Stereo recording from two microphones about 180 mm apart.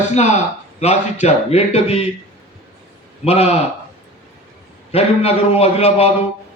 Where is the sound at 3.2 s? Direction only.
35° left (ahead or behind).